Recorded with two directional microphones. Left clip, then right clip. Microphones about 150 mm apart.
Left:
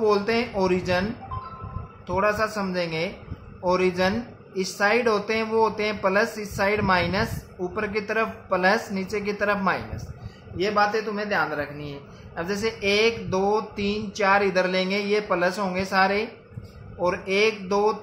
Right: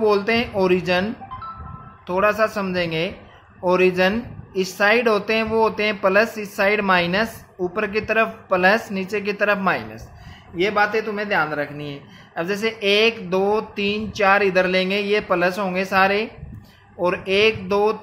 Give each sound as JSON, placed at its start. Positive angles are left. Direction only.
{"t": 0.0, "sound": "speech", "side_deg": -35}
{"t": 2.0, "sound": "speech", "side_deg": -35}
{"t": 10.6, "sound": "speech", "side_deg": -50}